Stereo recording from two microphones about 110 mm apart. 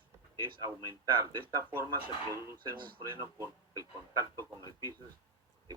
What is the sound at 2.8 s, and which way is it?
Speech, 45° right (ahead or behind).